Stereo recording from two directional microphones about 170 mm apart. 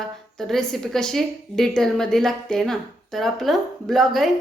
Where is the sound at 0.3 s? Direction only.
Centre (ahead or behind).